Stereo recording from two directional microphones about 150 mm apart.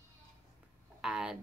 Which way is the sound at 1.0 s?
5° right (ahead or behind).